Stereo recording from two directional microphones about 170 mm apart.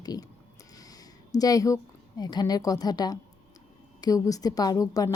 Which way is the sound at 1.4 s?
20° left (ahead or behind).